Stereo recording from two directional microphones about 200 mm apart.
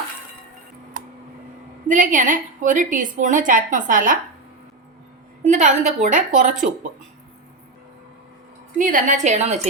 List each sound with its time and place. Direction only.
0.9 s a sound: 45° right (ahead or behind)
1.9 s a woman's voice: 40° right (ahead or behind)
5.4 s a woman's voice: 35° right (ahead or behind)
8.8 s a woman's voice: 40° right (ahead or behind)